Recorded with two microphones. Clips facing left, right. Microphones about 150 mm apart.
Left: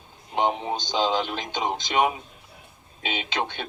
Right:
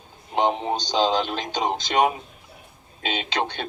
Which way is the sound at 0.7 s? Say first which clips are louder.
Right 3 dB; 40° right (ahead or behind).